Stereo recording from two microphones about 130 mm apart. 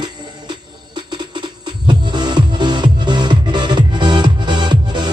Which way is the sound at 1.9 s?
35° right (ahead or behind).